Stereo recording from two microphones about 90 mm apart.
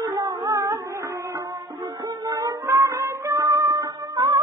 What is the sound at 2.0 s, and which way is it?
Music, 45° right (ahead or behind).